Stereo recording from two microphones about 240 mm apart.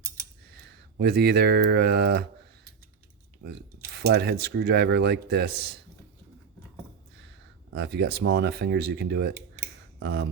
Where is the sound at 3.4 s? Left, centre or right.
Right.